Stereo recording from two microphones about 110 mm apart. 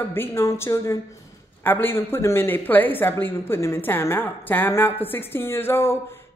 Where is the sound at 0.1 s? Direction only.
20° left (ahead or behind).